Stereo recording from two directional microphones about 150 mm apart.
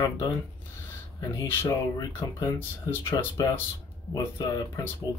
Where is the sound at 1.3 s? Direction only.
20° left (ahead or behind).